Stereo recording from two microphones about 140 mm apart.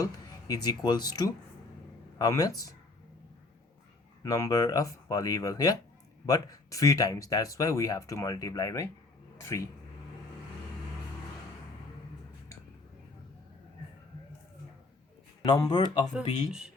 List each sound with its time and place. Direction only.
0.0 s speech: 25° left (ahead or behind)
4.2 s speech: 25° left (ahead or behind)
15.4 s speech: 30° left (ahead or behind)
16.1 s speech: 5° right (ahead or behind)